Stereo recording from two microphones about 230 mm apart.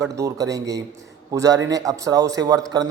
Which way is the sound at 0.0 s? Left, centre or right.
Centre.